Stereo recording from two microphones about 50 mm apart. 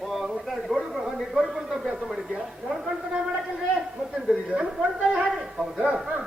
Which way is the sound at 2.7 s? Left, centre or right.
Centre.